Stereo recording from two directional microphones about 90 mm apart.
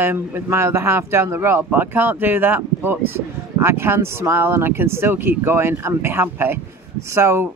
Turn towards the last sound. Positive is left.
turn(degrees=-30)  # may be behind; listen again after turning